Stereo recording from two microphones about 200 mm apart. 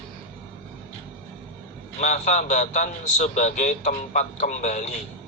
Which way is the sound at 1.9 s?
35° left (ahead or behind).